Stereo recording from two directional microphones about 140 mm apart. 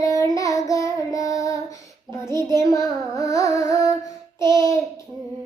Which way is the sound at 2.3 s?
30° right (ahead or behind).